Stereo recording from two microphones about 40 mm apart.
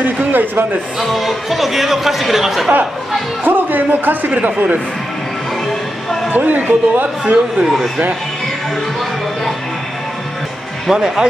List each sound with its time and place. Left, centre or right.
0.0 s a man's voice: right
0.9 s speech: centre
3.4 s a man's voice: right
6.3 s a man's voice: right
7.6 s speech: centre
10.9 s speech: centre